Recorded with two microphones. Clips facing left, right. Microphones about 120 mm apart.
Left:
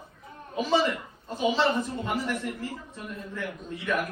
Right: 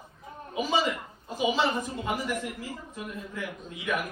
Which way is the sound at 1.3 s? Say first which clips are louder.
Left 2 dB; 5° right (ahead or behind).